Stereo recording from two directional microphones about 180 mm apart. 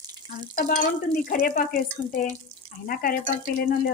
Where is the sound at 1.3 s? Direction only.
55° left (ahead or behind).